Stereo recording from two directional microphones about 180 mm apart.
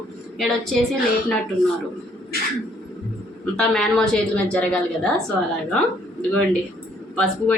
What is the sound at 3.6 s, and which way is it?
Speech, centre (ahead or behind).